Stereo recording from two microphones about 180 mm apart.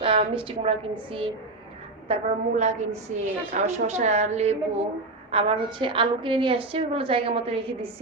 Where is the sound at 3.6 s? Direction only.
40° right (ahead or behind).